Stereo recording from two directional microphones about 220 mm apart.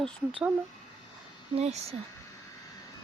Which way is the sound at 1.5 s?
30° right (ahead or behind).